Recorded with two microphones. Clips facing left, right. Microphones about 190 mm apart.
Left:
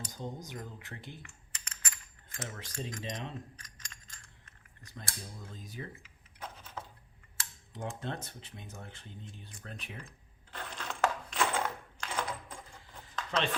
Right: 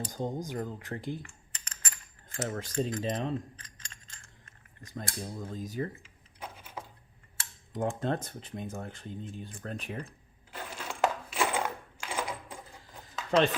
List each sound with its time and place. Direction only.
0.2 s speech: 50° right (ahead or behind)
2.5 s speech: 45° right (ahead or behind)
2.9 s keys jangling: 35° right (ahead or behind)
4.9 s speech: 45° right (ahead or behind)
6.4 s a sound: 10° right (ahead or behind)
7.7 s speech: 50° right (ahead or behind)
10.5 s coin: 10° right (ahead or behind)